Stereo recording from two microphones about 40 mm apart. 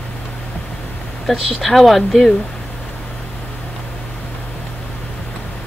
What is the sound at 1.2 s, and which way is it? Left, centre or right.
Speech, centre.